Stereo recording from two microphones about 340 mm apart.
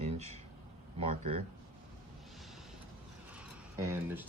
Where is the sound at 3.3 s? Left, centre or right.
Centre.